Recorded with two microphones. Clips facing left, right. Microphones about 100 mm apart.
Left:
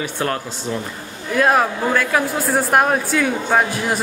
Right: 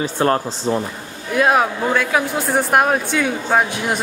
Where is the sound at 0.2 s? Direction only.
35° right (ahead or behind).